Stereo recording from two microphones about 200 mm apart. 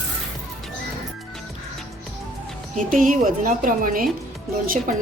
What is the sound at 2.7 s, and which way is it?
A woman's voice, 40° right (ahead or behind).